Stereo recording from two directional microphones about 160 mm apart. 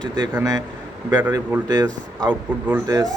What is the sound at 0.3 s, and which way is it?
Speech, 20° right (ahead or behind).